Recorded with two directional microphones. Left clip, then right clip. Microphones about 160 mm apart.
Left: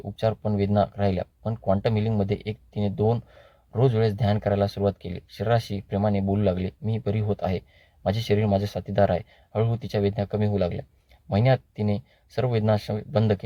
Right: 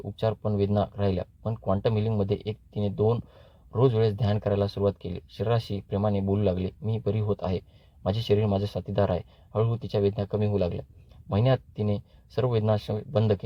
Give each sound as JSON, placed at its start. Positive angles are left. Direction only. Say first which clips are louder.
{"t": 0.3, "sound": "speech", "louder": "left 2 dB", "side_deg": 10}